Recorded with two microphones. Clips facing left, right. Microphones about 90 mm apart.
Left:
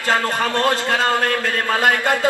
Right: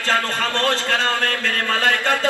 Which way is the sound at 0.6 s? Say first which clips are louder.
Left 2 dB; 15° left (ahead or behind).